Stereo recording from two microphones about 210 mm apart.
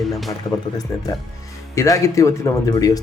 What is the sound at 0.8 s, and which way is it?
Speech, 20° left (ahead or behind).